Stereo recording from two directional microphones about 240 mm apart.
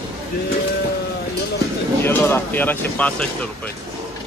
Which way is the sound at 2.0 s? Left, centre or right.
Centre.